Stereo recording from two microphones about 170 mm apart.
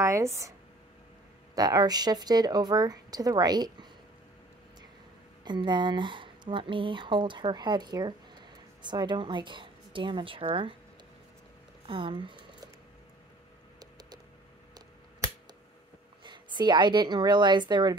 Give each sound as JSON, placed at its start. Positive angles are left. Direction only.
{"t": 0.0, "sound": "a woman's voice", "side_deg": -15}
{"t": 5.4, "sound": "speech", "side_deg": -25}
{"t": 11.8, "sound": "speech", "side_deg": -30}
{"t": 13.7, "sound": "a sound", "side_deg": -25}
{"t": 14.7, "sound": "finger snapping", "side_deg": -15}
{"t": 16.3, "sound": "a woman's voice", "side_deg": -25}